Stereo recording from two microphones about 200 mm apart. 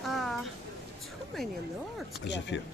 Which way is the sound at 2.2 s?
60° left (ahead or behind).